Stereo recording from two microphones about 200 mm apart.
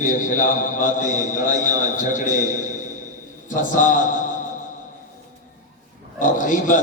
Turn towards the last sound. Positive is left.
turn(degrees=40)  # may be behind; listen again after turning